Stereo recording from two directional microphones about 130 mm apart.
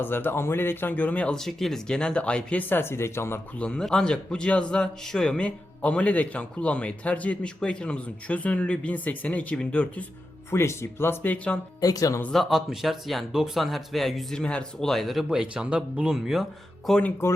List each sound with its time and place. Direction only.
0.0 s a man's voice: 15° left (ahead or behind)
3.7 s a man's voice: 5° left (ahead or behind)
11.8 s speech: 30° left (ahead or behind)
12.2 s speech: centre (ahead or behind)
17.0 s speech: 20° left (ahead or behind)